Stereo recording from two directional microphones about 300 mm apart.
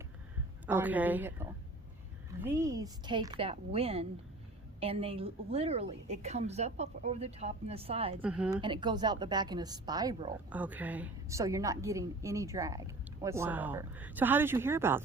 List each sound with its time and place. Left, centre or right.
0.7 s a woman's voice: centre
8.2 s speech: centre
8.6 s a woman's voice: centre